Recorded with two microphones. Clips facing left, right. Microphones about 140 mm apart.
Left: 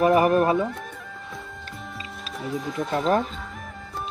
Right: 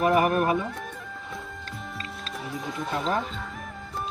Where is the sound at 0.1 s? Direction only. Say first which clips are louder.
Left 4 dB; 35° left (ahead or behind).